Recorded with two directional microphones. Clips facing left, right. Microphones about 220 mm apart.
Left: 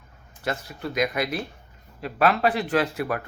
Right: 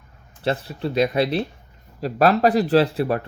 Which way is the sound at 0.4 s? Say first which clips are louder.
Right 6 dB; 30° right (ahead or behind).